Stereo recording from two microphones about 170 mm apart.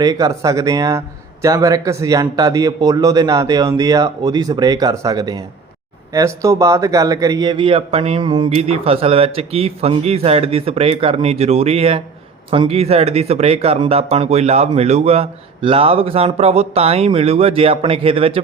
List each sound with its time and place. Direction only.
0.0 s speech: 20° right (ahead or behind)